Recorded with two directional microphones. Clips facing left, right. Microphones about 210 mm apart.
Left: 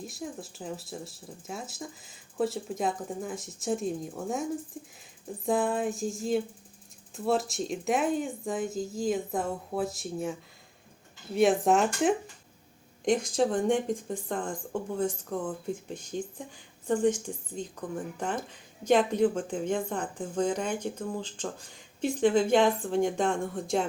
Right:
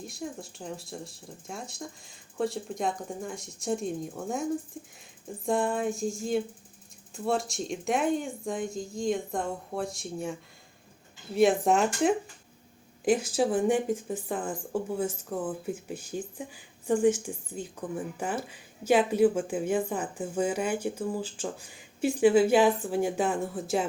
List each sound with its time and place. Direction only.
0.0 s speech: centre (ahead or behind)
11.3 s a woman's voice: centre (ahead or behind)